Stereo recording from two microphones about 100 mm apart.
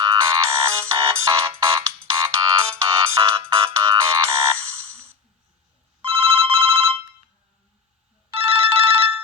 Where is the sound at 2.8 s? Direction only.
30° right (ahead or behind).